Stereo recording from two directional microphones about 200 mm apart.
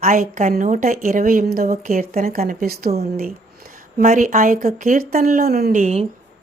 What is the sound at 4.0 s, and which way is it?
A woman's voice, 40° right (ahead or behind).